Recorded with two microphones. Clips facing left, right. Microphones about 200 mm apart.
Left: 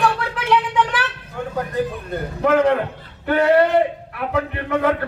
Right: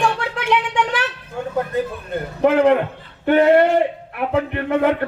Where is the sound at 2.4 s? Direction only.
30° right (ahead or behind).